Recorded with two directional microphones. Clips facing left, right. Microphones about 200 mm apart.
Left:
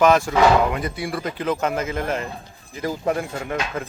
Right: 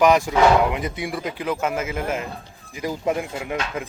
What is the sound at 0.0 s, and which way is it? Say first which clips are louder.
A man's voice: even; 15° right (ahead or behind).